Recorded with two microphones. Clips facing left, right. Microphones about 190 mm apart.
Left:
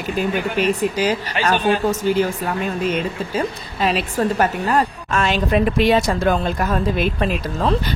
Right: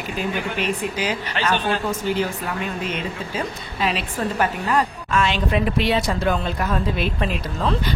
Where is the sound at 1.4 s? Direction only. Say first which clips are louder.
Left 2 dB; 10° left (ahead or behind).